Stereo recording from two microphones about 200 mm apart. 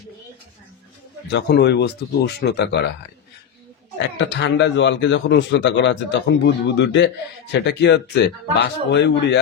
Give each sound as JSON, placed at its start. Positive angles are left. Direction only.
{"t": 1.3, "sound": "speech", "side_deg": 55}
{"t": 4.2, "sound": "speech", "side_deg": 60}